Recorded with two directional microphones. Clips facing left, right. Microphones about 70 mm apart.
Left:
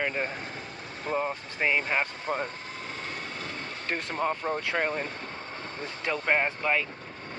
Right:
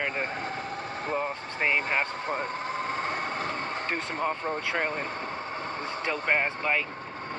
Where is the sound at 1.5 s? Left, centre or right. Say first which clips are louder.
Even; centre.